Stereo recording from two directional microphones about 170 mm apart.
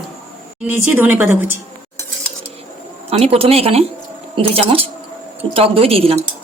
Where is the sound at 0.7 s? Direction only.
10° right (ahead or behind).